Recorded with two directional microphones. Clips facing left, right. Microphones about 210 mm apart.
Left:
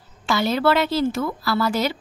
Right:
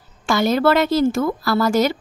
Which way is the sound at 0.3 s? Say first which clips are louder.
Right 3 dB; 45° right (ahead or behind).